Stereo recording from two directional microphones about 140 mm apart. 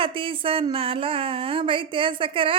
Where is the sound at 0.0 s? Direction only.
40° right (ahead or behind).